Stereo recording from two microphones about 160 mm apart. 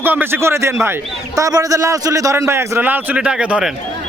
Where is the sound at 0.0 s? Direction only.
15° right (ahead or behind).